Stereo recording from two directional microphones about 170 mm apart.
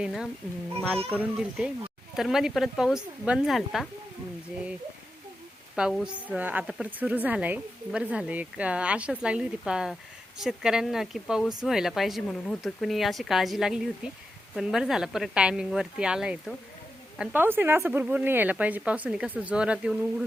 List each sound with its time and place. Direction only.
0.0 s a woman's voice: 5° right (ahead or behind)
5.7 s a woman's voice: 5° right (ahead or behind)